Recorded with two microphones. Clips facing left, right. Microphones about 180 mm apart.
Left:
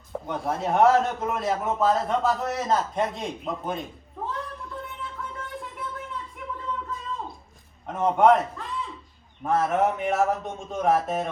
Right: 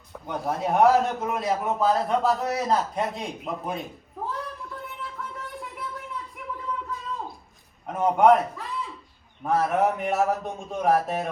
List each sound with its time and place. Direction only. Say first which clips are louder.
0.3 s a man's voice: right 1 dB; centre (ahead or behind)
6.7 s a sound: even; centre (ahead or behind)
7.9 s a man's voice: right 1 dB; centre (ahead or behind)